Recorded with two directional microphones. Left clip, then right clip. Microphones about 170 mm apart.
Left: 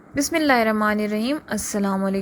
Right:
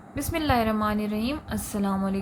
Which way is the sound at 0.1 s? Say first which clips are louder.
Left 6 dB; 40° left (ahead or behind).